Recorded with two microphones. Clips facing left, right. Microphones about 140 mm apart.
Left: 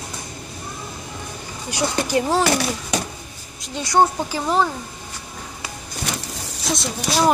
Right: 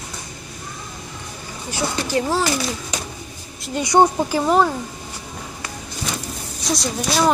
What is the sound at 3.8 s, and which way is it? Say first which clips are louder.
Speech: right 2 dB; 20° right (ahead or behind).